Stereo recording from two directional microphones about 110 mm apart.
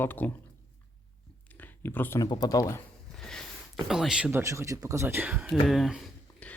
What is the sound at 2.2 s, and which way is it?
Speech, 35° left (ahead or behind).